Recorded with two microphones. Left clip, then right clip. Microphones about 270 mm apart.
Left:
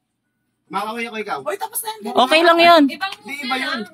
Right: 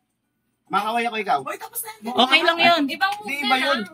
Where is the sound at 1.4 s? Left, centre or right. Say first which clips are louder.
Left 7 dB; left.